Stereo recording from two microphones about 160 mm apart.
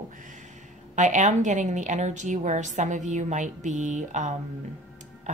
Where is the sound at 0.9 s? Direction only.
50° right (ahead or behind).